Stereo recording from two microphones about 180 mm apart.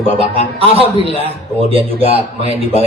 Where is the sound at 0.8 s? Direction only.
30° right (ahead or behind).